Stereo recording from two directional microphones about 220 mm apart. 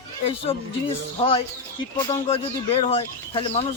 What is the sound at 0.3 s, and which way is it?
Speech, 25° left (ahead or behind).